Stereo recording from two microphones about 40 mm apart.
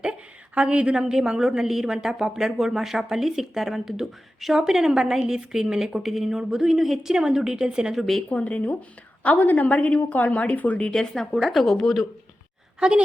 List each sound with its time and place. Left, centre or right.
0.5 s a woman's voice: right
0.9 s speech: centre
7.1 s speech: centre
7.9 s a woman's voice: centre
8.3 s a woman's voice: left
10.0 s speech: left
10.9 s a woman's voice: centre
12.8 s a woman's voice: right